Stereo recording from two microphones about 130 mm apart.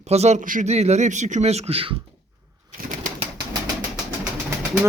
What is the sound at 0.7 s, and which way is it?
Speech, 55° right (ahead or behind).